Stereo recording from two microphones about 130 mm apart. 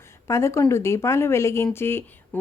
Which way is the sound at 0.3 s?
20° left (ahead or behind).